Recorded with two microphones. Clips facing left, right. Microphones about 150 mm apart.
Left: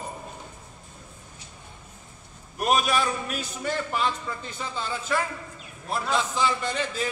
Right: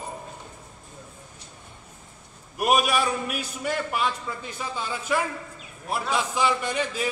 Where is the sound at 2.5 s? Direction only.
10° right (ahead or behind).